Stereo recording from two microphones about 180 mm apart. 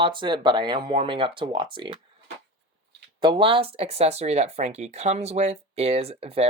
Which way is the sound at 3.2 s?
25° right (ahead or behind).